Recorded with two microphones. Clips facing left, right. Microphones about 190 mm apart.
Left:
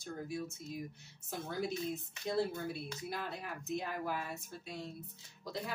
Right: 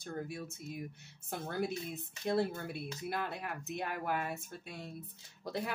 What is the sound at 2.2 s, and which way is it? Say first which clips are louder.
Speech: right 2 dB; 55° right (ahead or behind).